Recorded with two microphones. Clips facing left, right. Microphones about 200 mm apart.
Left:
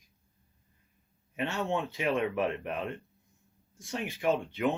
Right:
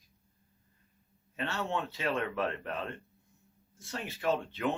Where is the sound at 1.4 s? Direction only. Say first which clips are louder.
Left 3 dB; 15° left (ahead or behind).